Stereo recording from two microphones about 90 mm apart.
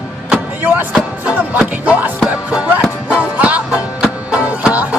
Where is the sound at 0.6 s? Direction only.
15° right (ahead or behind).